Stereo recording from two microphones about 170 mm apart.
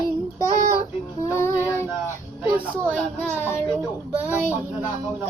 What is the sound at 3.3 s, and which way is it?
Child singing, 10° left (ahead or behind).